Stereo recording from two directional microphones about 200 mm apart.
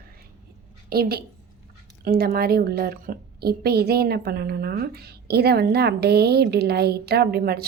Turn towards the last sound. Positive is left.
turn(degrees=-50)  # may be behind; listen again after turning